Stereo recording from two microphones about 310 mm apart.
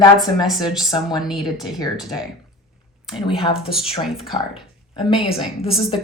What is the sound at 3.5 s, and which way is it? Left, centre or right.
Speech, centre.